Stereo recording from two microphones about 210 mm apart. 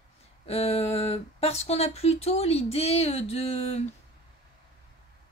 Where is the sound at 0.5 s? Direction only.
30° left (ahead or behind).